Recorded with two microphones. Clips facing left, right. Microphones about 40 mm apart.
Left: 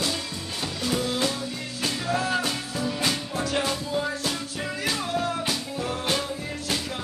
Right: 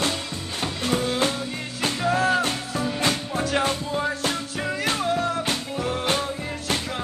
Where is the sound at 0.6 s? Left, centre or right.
Right.